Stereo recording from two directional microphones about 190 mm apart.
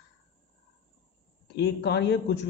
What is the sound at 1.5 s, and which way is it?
Speech, 65° left (ahead or behind).